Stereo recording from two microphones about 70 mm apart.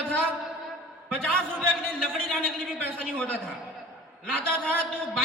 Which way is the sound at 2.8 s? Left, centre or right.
Centre.